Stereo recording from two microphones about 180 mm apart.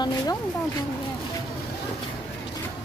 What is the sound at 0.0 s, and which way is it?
Speech, 20° left (ahead or behind).